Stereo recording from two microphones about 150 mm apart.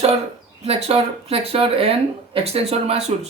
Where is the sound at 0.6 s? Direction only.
45° right (ahead or behind).